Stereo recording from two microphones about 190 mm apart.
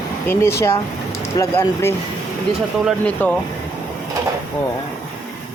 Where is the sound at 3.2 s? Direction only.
10° left (ahead or behind).